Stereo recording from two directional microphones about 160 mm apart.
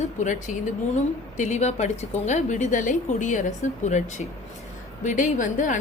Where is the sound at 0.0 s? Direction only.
50° left (ahead or behind).